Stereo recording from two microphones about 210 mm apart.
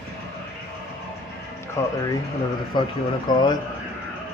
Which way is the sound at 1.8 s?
15° left (ahead or behind).